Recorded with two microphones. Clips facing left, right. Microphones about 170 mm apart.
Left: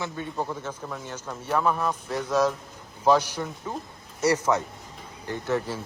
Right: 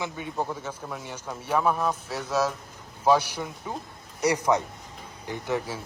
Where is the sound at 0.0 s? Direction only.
15° right (ahead or behind).